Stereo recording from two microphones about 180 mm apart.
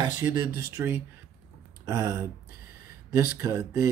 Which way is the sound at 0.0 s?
25° right (ahead or behind).